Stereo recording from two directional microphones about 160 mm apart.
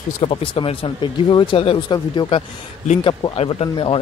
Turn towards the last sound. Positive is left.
turn(degrees=35)  # may be behind; listen again after turning